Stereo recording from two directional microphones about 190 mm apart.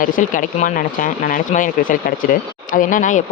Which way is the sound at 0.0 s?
45° left (ahead or behind).